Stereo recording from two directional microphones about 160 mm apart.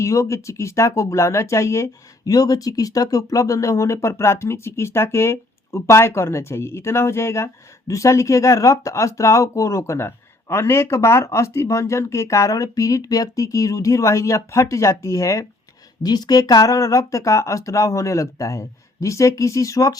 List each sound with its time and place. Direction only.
0.0 s speech: 20° left (ahead or behind)